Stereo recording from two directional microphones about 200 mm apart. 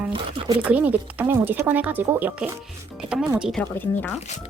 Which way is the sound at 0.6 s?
5° right (ahead or behind).